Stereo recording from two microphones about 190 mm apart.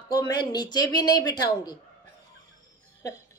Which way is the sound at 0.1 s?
20° left (ahead or behind).